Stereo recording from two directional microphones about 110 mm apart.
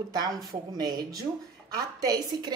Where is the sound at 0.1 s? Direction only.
35° right (ahead or behind).